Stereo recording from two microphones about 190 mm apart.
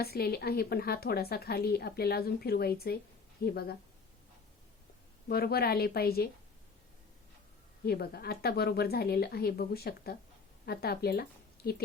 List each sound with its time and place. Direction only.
0.0 s a woman's voice: 55° left (ahead or behind)
5.3 s a woman's voice: 55° left (ahead or behind)
7.9 s a woman's voice: 55° left (ahead or behind)